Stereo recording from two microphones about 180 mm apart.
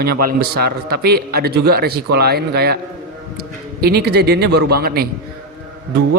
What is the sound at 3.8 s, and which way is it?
A man's voice, 65° right (ahead or behind).